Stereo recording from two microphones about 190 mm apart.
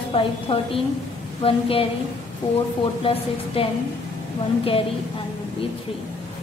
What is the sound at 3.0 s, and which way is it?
Speech, 30° left (ahead or behind).